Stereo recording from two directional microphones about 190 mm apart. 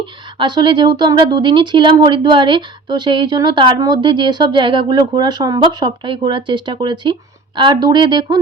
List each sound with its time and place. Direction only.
0.0 s speech: 25° right (ahead or behind)